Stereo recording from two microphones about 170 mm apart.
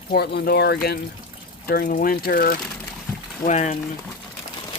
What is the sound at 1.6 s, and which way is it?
Speech, 60° left (ahead or behind).